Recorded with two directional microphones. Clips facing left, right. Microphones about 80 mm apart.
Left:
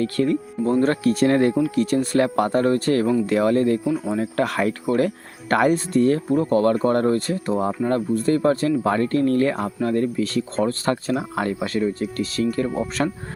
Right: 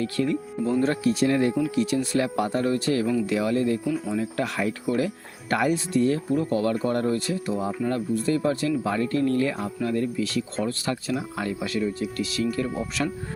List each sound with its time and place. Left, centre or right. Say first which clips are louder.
0.0 s speech: left 4 dB; left